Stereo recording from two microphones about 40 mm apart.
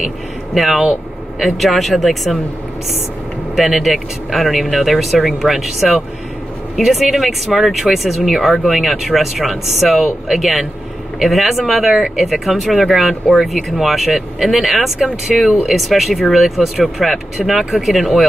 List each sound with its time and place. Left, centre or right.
0.6 s speech: centre
3.5 s speech: centre
11.9 s speech: centre
12.3 s speech: centre